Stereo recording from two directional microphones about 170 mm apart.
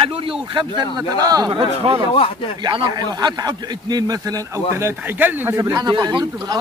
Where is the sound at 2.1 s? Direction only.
30° left (ahead or behind).